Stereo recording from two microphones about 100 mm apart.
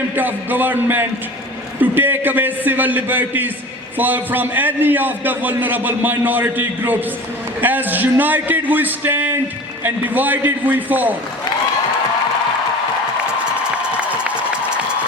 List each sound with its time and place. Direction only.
0.2 s a man's voice: 20° right (ahead or behind)